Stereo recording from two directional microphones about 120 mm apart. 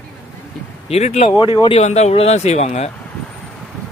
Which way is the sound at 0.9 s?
65° left (ahead or behind).